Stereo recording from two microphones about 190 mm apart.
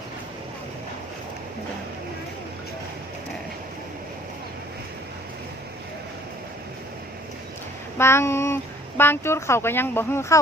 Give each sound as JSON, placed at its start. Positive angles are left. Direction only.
{"t": 7.9, "sound": "speech", "side_deg": 15}